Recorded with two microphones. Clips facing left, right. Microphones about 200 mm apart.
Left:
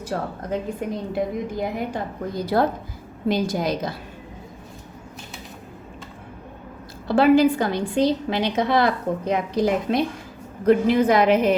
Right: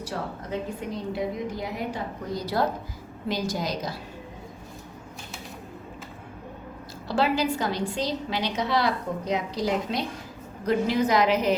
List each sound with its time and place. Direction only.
0.1 s a woman's voice: 50° left (ahead or behind)
7.1 s a woman's voice: 55° left (ahead or behind)